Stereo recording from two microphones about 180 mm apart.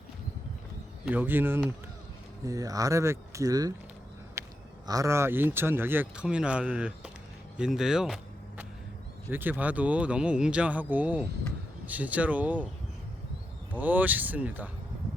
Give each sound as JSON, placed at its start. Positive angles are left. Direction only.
{"t": 1.0, "sound": "speech", "side_deg": -10}
{"t": 4.4, "sound": "a sound", "side_deg": -15}
{"t": 4.9, "sound": "speech", "side_deg": -15}
{"t": 13.7, "sound": "speech", "side_deg": -10}